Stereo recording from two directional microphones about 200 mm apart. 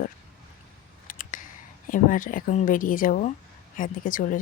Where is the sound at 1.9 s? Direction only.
40° left (ahead or behind).